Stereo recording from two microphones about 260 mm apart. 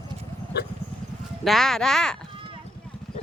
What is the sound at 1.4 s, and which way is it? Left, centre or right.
Speech, centre.